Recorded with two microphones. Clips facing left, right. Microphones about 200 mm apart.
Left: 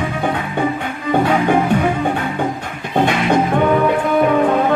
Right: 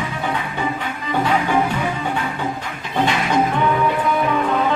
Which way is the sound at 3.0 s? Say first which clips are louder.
Left 2 dB; 55° left (ahead or behind).